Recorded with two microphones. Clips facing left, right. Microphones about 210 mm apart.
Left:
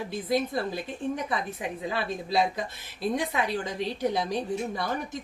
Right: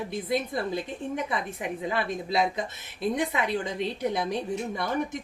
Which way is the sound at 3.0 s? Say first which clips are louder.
Right 1 dB; 20° right (ahead or behind).